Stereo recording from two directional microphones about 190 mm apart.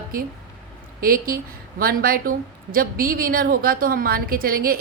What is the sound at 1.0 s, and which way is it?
A woman's voice, 50° right (ahead or behind).